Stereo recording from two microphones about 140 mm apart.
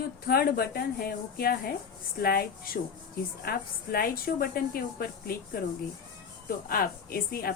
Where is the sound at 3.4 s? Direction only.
90° left.